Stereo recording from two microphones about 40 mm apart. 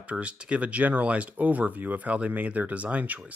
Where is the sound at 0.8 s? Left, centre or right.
Right.